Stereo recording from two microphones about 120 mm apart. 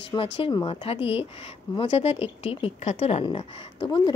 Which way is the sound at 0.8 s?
55° left (ahead or behind).